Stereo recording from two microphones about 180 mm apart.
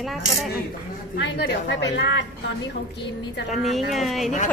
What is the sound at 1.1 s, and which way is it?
A woman's voice, 85° left.